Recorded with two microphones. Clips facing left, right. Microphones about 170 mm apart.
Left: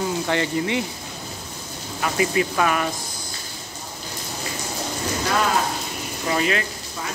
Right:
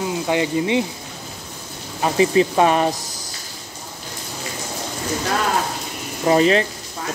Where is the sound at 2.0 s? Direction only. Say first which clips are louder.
Right 6 dB; 30° right (ahead or behind).